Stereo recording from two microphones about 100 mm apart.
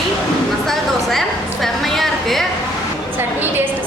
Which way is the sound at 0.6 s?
Centre (ahead or behind).